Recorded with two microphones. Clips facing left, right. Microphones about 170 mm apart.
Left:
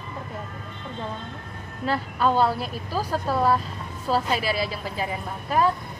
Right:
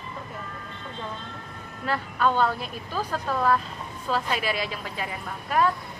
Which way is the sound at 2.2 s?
35° left (ahead or behind).